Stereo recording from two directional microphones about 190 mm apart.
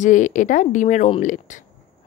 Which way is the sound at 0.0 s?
40° left (ahead or behind).